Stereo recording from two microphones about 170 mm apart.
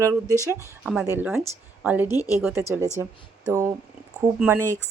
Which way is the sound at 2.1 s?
20° left (ahead or behind).